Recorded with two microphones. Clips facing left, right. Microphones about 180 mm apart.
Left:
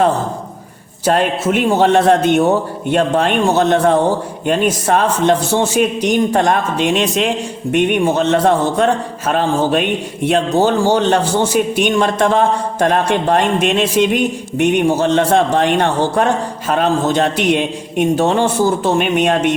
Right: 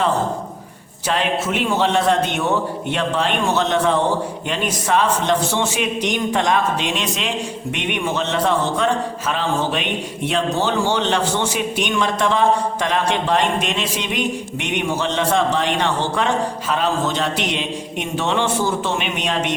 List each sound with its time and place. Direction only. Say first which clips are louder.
1.0 s a man's voice: left 6 dB; 45° left (ahead or behind)